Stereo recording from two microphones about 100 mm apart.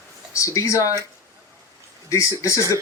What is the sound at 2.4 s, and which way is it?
Speech, 30° left (ahead or behind).